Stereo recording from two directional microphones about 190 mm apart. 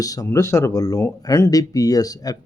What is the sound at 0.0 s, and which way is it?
Speech, 20° left (ahead or behind).